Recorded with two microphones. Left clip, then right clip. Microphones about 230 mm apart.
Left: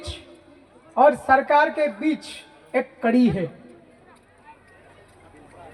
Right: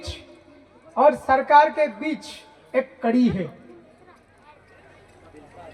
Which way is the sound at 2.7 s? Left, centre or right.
Left.